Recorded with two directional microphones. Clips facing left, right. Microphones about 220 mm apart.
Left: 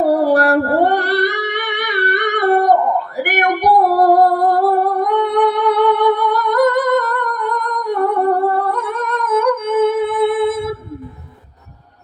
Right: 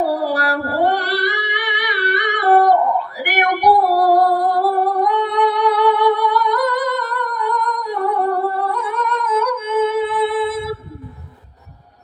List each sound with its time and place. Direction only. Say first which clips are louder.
0.0 s singing: left 6 dB; 50° left (ahead or behind)
3.2 s music: left 2 dB; 50° left (ahead or behind)